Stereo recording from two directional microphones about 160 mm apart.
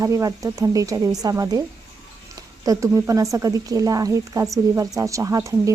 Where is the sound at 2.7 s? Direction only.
20° right (ahead or behind).